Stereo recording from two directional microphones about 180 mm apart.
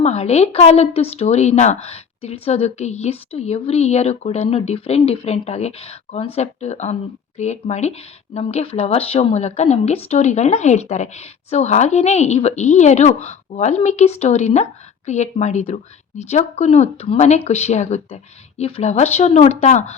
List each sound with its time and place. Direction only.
0.0 s speech: 35° left (ahead or behind)